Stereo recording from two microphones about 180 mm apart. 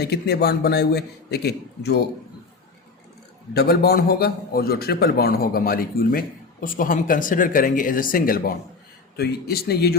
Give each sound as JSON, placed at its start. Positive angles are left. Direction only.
{"t": 0.0, "sound": "a man's voice", "side_deg": 65}
{"t": 3.5, "sound": "a man's voice", "side_deg": 60}